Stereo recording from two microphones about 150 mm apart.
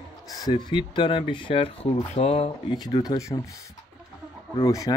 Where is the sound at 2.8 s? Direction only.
25° left (ahead or behind).